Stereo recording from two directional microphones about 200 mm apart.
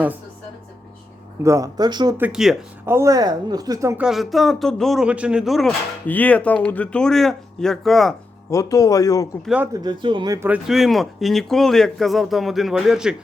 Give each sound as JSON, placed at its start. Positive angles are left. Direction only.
{"t": 1.5, "sound": "speech", "side_deg": -15}
{"t": 2.1, "sound": "a woman's voice", "side_deg": -5}
{"t": 8.4, "sound": "speech", "side_deg": 15}
{"t": 9.7, "sound": "a woman's voice", "side_deg": -25}